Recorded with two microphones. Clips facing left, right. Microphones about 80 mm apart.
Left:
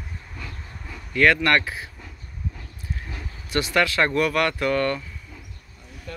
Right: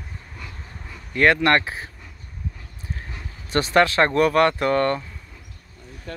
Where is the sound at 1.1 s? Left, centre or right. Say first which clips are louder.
Right 1 dB; right.